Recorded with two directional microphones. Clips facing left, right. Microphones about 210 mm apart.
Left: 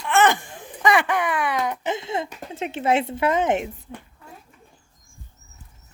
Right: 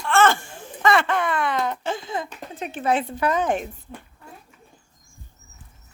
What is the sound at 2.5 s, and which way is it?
Speech, 25° left (ahead or behind).